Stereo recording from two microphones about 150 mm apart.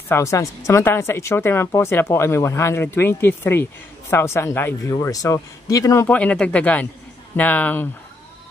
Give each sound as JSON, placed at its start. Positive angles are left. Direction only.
{"t": 0.1, "sound": "speech", "side_deg": 20}
{"t": 6.0, "sound": "speech", "side_deg": 10}